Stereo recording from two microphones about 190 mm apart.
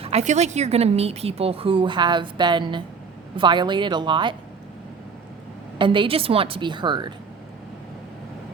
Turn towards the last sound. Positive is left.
turn(degrees=-25)  # may be behind; listen again after turning